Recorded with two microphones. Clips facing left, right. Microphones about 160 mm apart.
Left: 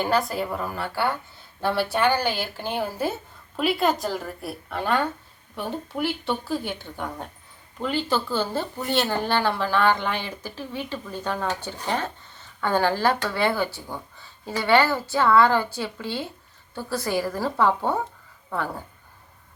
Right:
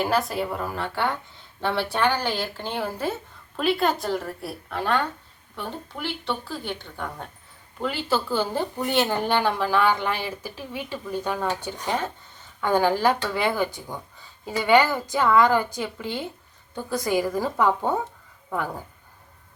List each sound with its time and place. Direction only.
0.0 s a woman's voice: centre (ahead or behind)
8.1 s speech: 10° right (ahead or behind)